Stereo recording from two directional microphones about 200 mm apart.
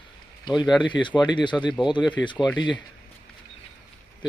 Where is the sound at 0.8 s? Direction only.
25° left (ahead or behind).